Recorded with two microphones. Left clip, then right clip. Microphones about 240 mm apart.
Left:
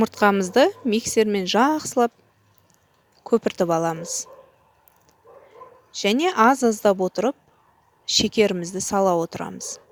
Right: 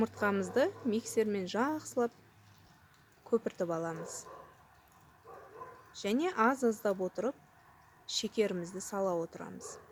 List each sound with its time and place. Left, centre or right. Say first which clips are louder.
0.0 s speech: left 13 dB; left
3.2 s speech: left 12 dB; left
5.9 s speech: left 13 dB; left